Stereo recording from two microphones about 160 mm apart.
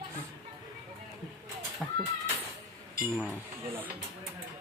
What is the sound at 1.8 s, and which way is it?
Speech, centre (ahead or behind).